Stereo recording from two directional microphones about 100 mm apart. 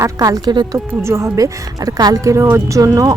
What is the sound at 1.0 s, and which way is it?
A woman's voice, 30° right (ahead or behind).